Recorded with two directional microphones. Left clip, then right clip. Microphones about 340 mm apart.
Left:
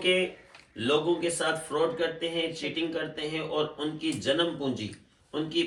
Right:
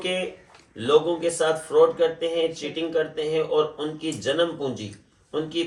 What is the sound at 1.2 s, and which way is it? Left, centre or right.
Speech, centre.